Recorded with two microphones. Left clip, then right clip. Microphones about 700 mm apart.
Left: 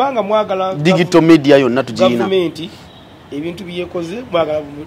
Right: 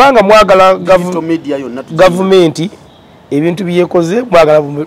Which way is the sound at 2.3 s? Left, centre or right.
Right.